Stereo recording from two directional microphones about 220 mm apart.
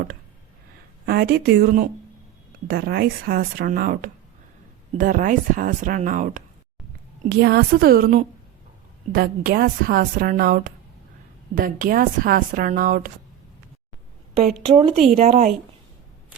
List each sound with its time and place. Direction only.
1.0 s a woman's voice: 45° right (ahead or behind)
14.6 s speech: 25° right (ahead or behind)